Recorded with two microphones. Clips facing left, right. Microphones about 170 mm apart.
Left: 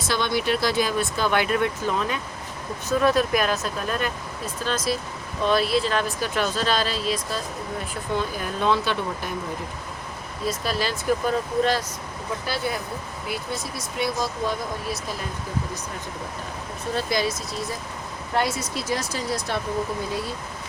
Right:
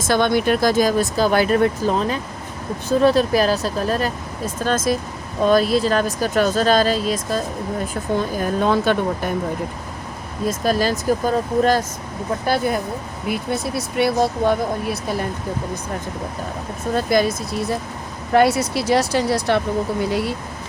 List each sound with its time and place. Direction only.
0.1 s speech: 50° right (ahead or behind)
10.4 s speech: 45° right (ahead or behind)
16.9 s speech: 50° right (ahead or behind)
18.3 s speech: 65° right (ahead or behind)